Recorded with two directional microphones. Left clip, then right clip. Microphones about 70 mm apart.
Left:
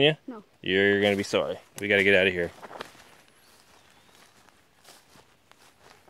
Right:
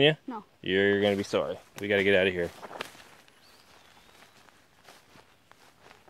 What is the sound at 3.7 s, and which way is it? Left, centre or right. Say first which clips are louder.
Walk: right 1 dB; centre.